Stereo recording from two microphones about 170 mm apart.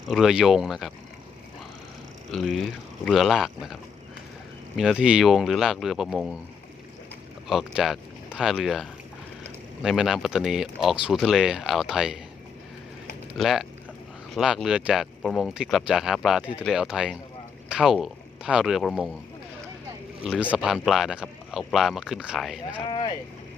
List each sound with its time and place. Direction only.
0.1 s speech: centre (ahead or behind)
2.3 s speech: centre (ahead or behind)
4.8 s speech: 5° right (ahead or behind)
7.4 s speech: centre (ahead or behind)
13.3 s speech: centre (ahead or behind)
20.5 s speech: 5° right (ahead or behind)
22.9 s speech: 25° left (ahead or behind)